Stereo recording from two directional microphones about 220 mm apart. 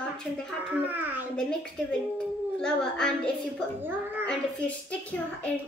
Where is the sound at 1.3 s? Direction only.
5° left (ahead or behind).